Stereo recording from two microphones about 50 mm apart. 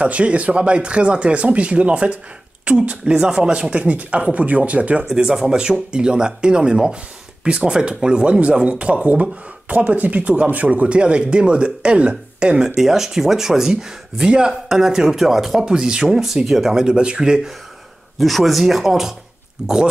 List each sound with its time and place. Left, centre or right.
0.0 s speech: right
5.1 s speech: centre
12.7 s speech: centre
15.6 s speech: centre
16.8 s speech: centre
18.2 s speech: centre